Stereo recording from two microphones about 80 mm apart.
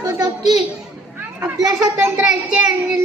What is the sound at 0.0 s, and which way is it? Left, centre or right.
Children playing, right.